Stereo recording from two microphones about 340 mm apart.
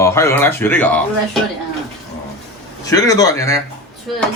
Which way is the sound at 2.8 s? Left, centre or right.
Centre.